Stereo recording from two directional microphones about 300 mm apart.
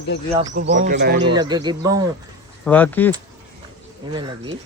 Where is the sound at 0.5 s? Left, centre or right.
Right.